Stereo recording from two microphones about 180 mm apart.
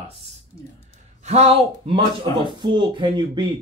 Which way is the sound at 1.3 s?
35° right (ahead or behind).